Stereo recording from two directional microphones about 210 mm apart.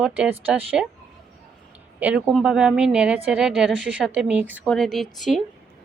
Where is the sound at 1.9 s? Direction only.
5° right (ahead or behind).